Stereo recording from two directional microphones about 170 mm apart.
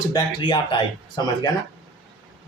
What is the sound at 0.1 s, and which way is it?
Speech, 25° left (ahead or behind).